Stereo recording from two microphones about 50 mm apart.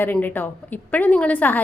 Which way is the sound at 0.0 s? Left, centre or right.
Left.